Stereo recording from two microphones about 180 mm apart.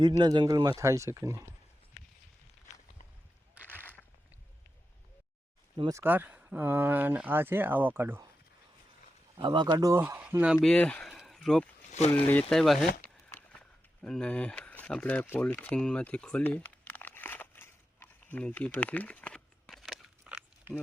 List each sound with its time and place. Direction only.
0.2 s speech: 25° right (ahead or behind)
5.7 s speech: 25° right (ahead or behind)
6.0 s speech: 10° right (ahead or behind)
9.4 s speech: 25° right (ahead or behind)
10.0 s speech: 10° right (ahead or behind)
11.9 s speech: 40° left (ahead or behind)
12.3 s speech: 5° left (ahead or behind)
13.0 s a sound: 5° left (ahead or behind)